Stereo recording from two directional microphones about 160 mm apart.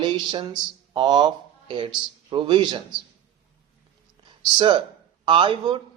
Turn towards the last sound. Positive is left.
turn(degrees=-30)  # may be behind; listen again after turning